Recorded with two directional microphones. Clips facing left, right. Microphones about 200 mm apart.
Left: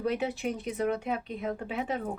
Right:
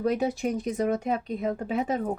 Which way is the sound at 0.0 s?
45° right (ahead or behind).